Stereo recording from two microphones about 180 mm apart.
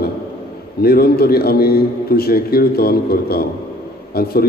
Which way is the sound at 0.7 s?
60° left (ahead or behind).